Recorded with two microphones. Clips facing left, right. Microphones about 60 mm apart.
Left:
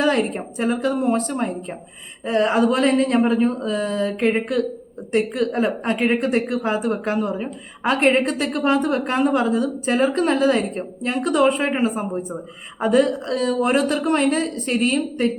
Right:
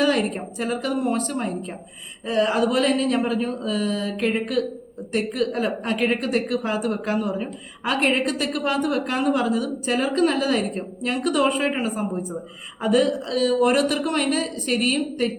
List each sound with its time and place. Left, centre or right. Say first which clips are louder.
0.0 s a woman's voice: left 1 dB; left
2.2 s a woman's voice: left 3 dB; left